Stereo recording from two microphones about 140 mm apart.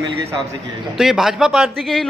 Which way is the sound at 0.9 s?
Centre (ahead or behind).